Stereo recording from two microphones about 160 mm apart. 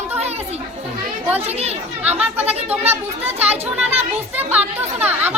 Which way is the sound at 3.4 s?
40° right (ahead or behind).